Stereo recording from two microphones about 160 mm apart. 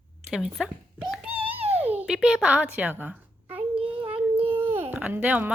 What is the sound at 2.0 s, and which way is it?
A child's voice, 5° right (ahead or behind).